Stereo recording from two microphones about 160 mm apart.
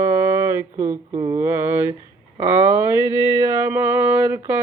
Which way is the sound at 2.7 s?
15° right (ahead or behind).